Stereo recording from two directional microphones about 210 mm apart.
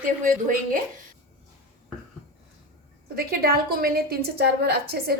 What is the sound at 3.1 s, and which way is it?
A woman's voice, 45° right (ahead or behind).